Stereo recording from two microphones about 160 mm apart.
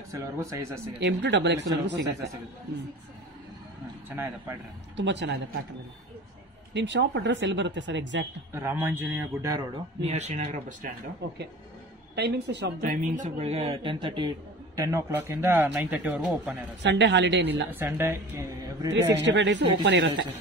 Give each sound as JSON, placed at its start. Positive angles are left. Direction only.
{"t": 0.1, "sound": "speech", "side_deg": -20}
{"t": 0.9, "sound": "speech", "side_deg": -90}
{"t": 4.1, "sound": "speech", "side_deg": -15}
{"t": 4.9, "sound": "speech", "side_deg": -90}
{"t": 6.7, "sound": "speech", "side_deg": -90}
{"t": 8.5, "sound": "speech", "side_deg": -15}
{"t": 10.0, "sound": "speech", "side_deg": -45}
{"t": 12.2, "sound": "speech", "side_deg": -90}
{"t": 13.1, "sound": "speech", "side_deg": -45}
{"t": 16.8, "sound": "speech", "side_deg": -90}
{"t": 17.6, "sound": "speech", "side_deg": -15}
{"t": 18.9, "sound": "speech", "side_deg": -90}